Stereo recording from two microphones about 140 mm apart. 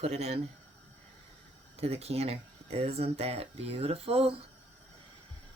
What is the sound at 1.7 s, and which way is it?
Speech, 45° right (ahead or behind).